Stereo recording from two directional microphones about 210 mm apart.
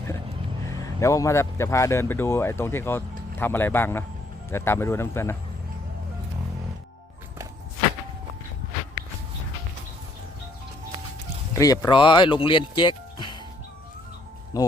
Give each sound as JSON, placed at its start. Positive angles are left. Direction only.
{"t": 0.7, "sound": "speech", "side_deg": 15}
{"t": 11.5, "sound": "speech", "side_deg": 15}
{"t": 14.5, "sound": "speech", "side_deg": 15}